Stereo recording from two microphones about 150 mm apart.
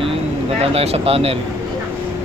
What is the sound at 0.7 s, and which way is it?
Speech, 40° right (ahead or behind).